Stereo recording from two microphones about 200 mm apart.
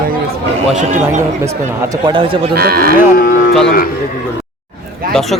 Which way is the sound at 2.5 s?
50° right (ahead or behind).